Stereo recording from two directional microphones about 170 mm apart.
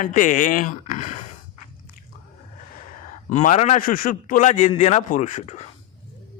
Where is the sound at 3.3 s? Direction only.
45° left (ahead or behind).